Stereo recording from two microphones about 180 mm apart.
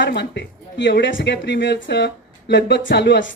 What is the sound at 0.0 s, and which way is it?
Speech, 75° left (ahead or behind).